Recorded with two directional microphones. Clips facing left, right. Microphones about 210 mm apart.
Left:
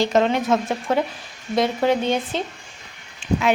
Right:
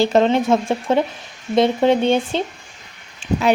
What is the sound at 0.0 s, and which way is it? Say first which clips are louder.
Speech: right 4 dB; 30° right (ahead or behind).